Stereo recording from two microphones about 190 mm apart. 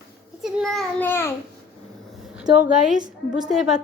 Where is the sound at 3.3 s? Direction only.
5° right (ahead or behind).